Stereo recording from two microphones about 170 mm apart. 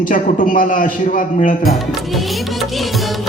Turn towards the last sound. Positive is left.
turn(degrees=0)  # may be behind; listen again after turning